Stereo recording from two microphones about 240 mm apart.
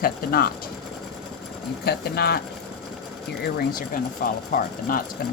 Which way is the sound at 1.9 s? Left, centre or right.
Left.